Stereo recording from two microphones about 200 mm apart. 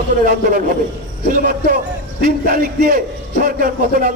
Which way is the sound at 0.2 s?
45° right (ahead or behind).